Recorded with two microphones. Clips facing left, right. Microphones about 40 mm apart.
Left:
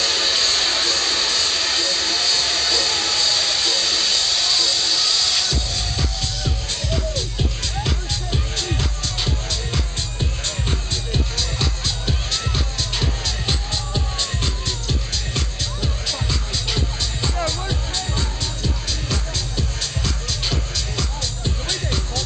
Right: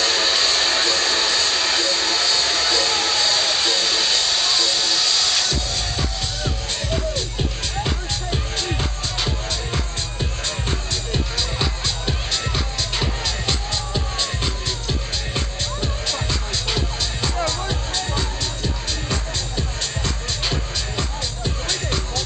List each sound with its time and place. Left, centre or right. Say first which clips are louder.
0.0 s a sound: right 1 dB; centre
7.8 s music: right 1 dB; centre
11.3 s music: right 1 dB; centre
19.0 s music: even; centre